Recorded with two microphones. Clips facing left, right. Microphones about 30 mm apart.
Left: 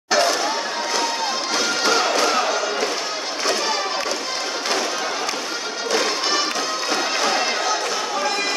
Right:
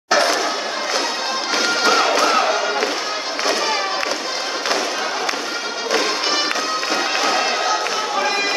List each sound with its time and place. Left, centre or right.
0.1 s a sound: right
1.5 s music: right
6.9 s music: centre